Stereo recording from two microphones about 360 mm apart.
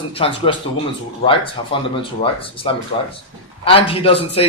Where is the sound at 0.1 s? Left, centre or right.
Centre.